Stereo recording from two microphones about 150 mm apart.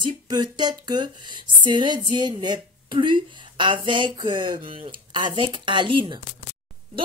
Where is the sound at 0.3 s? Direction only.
30° right (ahead or behind).